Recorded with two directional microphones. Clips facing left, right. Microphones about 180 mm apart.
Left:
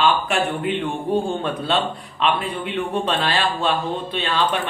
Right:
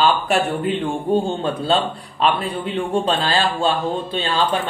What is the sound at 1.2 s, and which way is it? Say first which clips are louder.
A man's voice: right 2 dB; 30° right (ahead or behind).